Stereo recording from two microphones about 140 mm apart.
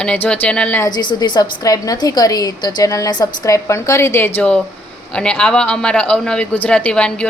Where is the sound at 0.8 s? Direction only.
30° left (ahead or behind).